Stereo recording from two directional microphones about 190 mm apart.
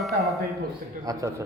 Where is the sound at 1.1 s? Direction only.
20° right (ahead or behind).